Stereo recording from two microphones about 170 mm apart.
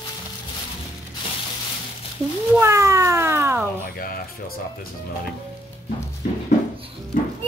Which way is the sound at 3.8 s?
60° left (ahead or behind).